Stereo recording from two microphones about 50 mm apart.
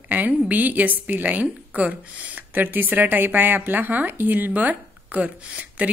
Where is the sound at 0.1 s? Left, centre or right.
Right.